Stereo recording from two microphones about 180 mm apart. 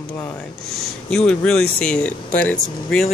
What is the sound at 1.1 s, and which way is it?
Speech, 5° left (ahead or behind).